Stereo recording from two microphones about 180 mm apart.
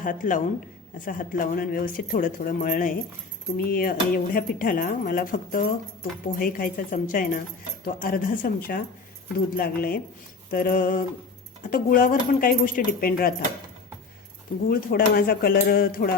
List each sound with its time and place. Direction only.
0.0 s speech: 45° left (ahead or behind)
14.7 s speech: 55° left (ahead or behind)